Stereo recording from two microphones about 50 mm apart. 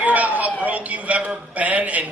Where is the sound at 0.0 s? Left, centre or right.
Right.